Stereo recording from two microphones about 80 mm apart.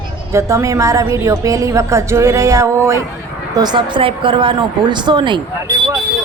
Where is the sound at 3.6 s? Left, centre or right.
Right.